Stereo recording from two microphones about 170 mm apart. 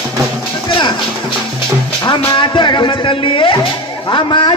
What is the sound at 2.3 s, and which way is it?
Speech, 30° left (ahead or behind).